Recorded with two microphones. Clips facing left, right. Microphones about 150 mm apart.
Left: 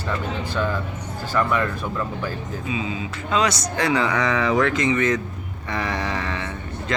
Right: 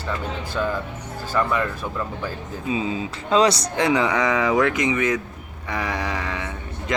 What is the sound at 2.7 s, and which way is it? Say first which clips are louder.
Speech: right 4 dB; 35° right (ahead or behind).